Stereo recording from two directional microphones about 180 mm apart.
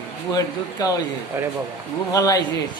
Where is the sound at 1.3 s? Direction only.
15° right (ahead or behind).